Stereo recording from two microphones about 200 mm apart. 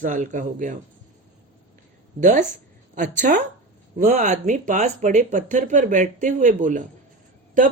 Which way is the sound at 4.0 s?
35° right (ahead or behind).